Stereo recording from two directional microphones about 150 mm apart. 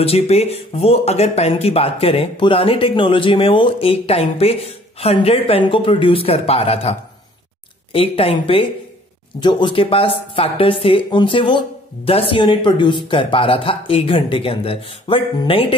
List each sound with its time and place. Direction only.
0.0 s a woman's voice: 45° left (ahead or behind)